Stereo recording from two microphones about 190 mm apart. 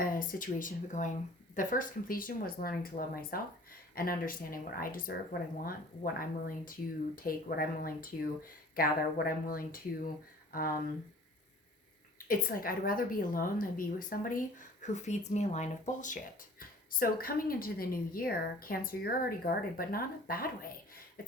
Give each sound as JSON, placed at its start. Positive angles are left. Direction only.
{"t": 0.0, "sound": "a woman's voice", "side_deg": 45}
{"t": 12.3, "sound": "a woman's voice", "side_deg": 50}